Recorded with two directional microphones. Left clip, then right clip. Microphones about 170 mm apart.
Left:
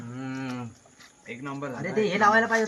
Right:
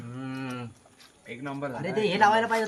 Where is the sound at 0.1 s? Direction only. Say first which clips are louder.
Left 1 dB; 20° right (ahead or behind).